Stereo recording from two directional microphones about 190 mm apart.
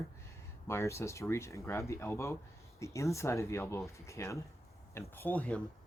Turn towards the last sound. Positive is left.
turn(degrees=10)  # may be behind; listen again after turning